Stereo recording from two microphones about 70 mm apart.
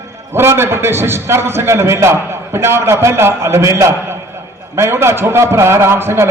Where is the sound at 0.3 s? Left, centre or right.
Right.